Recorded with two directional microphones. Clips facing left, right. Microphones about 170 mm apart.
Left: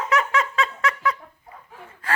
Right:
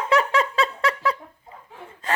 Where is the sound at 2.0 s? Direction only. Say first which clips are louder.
Right 1 dB; 25° right (ahead or behind).